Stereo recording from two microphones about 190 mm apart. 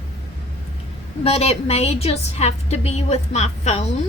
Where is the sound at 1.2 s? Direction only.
30° left (ahead or behind).